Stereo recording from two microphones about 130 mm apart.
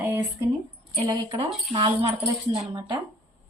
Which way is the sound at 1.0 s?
35° right (ahead or behind).